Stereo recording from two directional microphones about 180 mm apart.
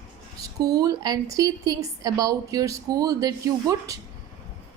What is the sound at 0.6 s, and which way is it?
A woman's voice, 20° right (ahead or behind).